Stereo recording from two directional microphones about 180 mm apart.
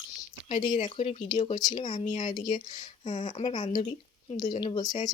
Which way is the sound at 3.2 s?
40° left (ahead or behind).